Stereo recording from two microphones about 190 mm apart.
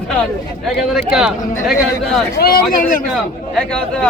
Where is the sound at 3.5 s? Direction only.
5° left (ahead or behind).